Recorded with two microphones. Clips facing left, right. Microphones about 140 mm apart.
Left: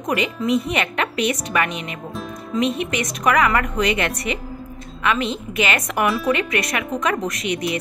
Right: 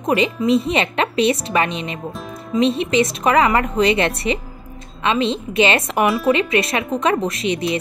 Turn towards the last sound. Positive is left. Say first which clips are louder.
# right 3 dB
turn(degrees=-25)  # may be behind; listen again after turning